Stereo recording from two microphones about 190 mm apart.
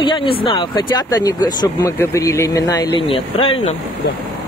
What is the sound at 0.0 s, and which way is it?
Speech, 25° left (ahead or behind).